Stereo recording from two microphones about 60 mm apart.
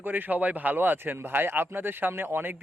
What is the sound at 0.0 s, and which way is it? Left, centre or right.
Speech, right.